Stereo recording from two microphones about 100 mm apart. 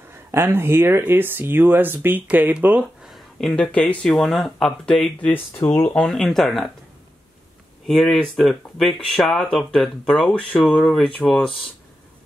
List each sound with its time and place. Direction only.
0.3 s speech: 25° right (ahead or behind)
3.0 s a sound: centre (ahead or behind)
4.0 s speech: 5° left (ahead or behind)
5.3 s speech: 20° left (ahead or behind)
6.0 s speech: 5° left (ahead or behind)
7.8 s speech: centre (ahead or behind)